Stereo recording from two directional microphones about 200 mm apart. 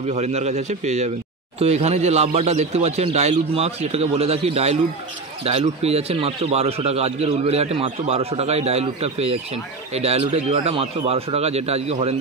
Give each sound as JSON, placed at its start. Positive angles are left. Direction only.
{"t": 0.1, "sound": "a man's voice", "side_deg": -35}